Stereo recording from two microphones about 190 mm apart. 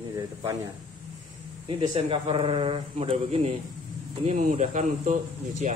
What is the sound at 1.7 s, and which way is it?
A man's voice, 25° right (ahead or behind).